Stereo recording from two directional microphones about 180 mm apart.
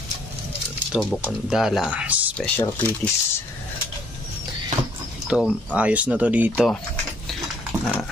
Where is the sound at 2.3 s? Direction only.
10° left (ahead or behind).